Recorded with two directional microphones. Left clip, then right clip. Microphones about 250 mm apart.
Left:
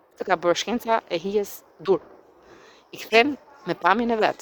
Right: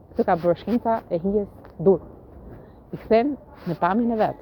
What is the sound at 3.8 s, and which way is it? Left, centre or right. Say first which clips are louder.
Speech: left 1 dB; left.